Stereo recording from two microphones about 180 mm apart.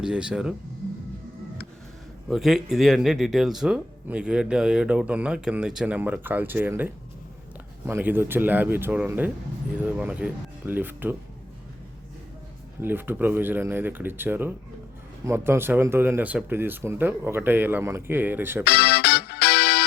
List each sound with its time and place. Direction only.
0.0 s speech: 5° right (ahead or behind)
2.3 s speech: centre (ahead or behind)
12.8 s speech: 10° right (ahead or behind)
18.6 s music: 65° left (ahead or behind)